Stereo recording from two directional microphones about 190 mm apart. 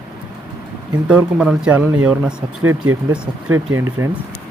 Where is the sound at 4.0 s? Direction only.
15° right (ahead or behind).